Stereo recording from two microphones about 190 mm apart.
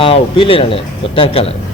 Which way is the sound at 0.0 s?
25° left (ahead or behind).